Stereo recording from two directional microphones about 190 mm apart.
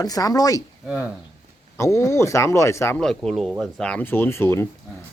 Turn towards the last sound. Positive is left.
turn(degrees=15)  # may be behind; listen again after turning